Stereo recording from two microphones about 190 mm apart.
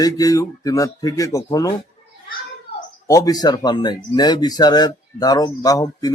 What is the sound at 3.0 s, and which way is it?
Speech, 20° left (ahead or behind).